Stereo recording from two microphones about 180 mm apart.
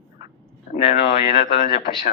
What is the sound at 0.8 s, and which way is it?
Speech, 30° left (ahead or behind).